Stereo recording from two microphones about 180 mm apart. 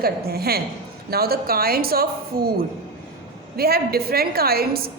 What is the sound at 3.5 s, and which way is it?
A woman's voice, 60° right (ahead or behind).